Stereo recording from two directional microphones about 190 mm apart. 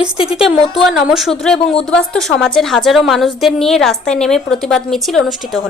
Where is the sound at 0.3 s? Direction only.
Centre (ahead or behind).